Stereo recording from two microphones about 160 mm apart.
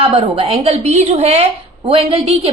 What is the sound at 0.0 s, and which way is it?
A woman's voice, 40° right (ahead or behind).